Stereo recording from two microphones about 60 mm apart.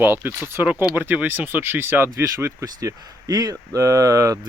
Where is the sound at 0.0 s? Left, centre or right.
Right.